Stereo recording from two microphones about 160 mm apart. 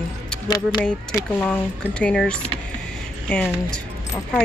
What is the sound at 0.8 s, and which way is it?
Speech, 5° left (ahead or behind).